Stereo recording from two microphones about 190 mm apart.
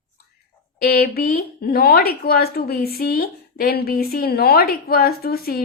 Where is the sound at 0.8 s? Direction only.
50° left (ahead or behind).